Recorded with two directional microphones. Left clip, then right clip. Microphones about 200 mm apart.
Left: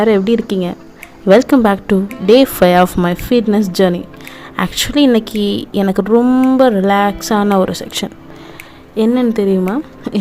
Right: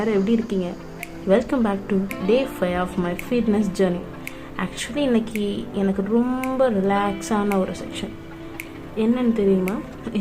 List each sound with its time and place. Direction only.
0.0 s a woman's voice: 45° left (ahead or behind)